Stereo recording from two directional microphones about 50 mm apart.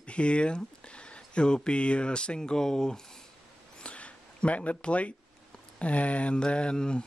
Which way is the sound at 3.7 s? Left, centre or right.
Left.